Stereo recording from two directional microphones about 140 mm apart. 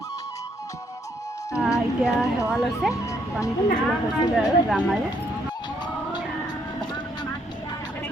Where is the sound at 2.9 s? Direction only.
25° left (ahead or behind).